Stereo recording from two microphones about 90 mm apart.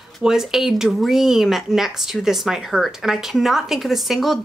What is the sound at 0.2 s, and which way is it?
Speech, 5° right (ahead or behind).